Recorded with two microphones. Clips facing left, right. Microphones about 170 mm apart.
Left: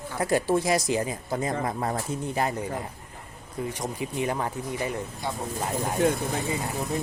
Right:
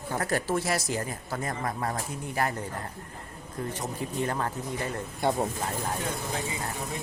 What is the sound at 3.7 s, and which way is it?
Speech, 15° left (ahead or behind).